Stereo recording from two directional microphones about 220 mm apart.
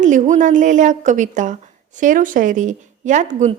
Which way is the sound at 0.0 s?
35° right (ahead or behind).